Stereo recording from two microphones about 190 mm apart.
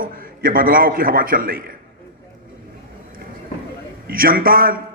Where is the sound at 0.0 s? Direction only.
50° right (ahead or behind).